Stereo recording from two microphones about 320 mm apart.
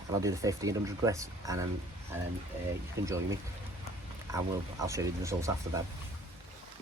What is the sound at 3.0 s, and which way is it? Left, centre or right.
Speech, centre.